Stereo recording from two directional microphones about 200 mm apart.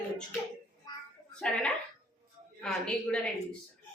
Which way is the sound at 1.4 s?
5° left (ahead or behind).